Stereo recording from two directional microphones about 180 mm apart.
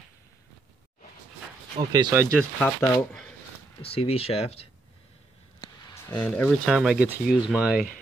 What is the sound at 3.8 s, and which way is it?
Speech, 30° left (ahead or behind).